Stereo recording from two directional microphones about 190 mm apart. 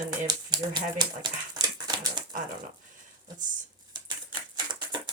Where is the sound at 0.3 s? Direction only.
20° right (ahead or behind).